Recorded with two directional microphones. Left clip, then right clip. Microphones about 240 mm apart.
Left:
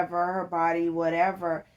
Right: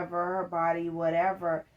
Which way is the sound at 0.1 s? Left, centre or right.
Left.